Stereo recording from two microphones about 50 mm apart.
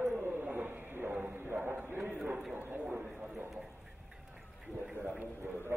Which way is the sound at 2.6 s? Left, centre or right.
Right.